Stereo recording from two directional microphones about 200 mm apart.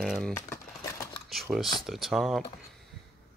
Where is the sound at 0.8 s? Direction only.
15° left (ahead or behind).